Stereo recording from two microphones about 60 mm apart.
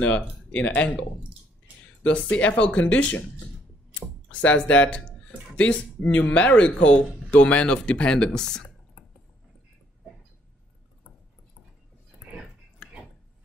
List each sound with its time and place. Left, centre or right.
0.0 s speech: left
0.6 s speech: left
2.0 s speech: left
4.3 s speech: left